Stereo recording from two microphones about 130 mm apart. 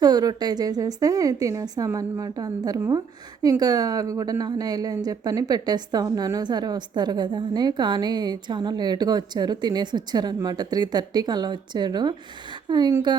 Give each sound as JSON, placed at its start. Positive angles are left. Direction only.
{"t": 0.0, "sound": "a woman's voice", "side_deg": -30}